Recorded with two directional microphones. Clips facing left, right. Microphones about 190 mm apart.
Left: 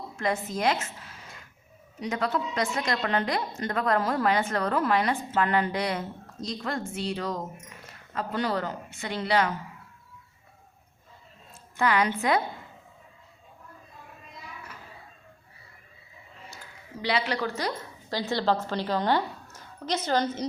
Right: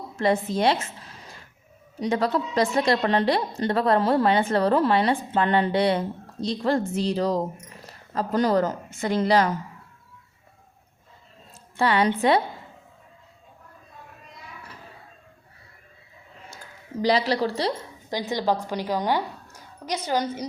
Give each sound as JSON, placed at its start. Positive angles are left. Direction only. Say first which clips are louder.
{"t": 0.2, "sound": "a woman's voice", "louder": "right 6 dB", "side_deg": -30}
{"t": 11.8, "sound": "a woman's voice", "louder": "right 4 dB", "side_deg": -30}
{"t": 17.0, "sound": "a woman's voice", "louder": "right 6 dB", "side_deg": -40}
{"t": 18.1, "sound": "a woman's voice", "louder": "right 1 dB", "side_deg": -15}